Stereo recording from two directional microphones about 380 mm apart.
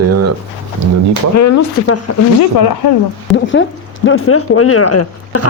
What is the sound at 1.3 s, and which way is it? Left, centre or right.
Speech, left.